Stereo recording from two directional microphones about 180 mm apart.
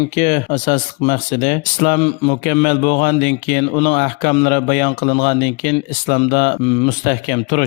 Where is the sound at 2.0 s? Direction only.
35° left (ahead or behind).